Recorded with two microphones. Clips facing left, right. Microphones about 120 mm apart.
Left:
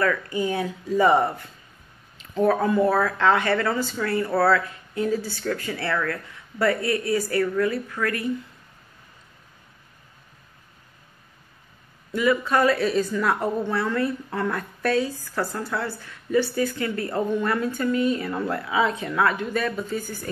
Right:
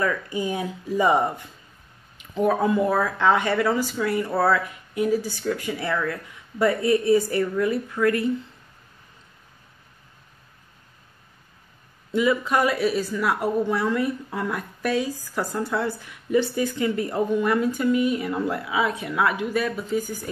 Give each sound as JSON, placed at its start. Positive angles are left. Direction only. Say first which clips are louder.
{"t": 0.0, "sound": "speech", "louder": "left 1 dB", "side_deg": -15}
{"t": 12.1, "sound": "speech", "louder": "even", "side_deg": -20}